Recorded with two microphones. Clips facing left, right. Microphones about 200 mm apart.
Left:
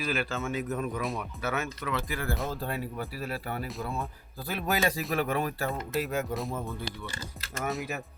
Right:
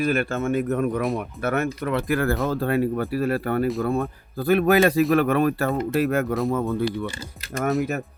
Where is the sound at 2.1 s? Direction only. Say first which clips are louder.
Right 11 dB; 80° right; by 6.4 s 65° right (ahead or behind).